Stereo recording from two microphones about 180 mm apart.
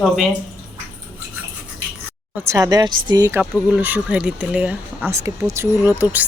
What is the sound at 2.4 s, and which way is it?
Speech, 15° right (ahead or behind).